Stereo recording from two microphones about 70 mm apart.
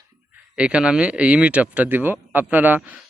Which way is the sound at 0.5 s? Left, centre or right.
Centre.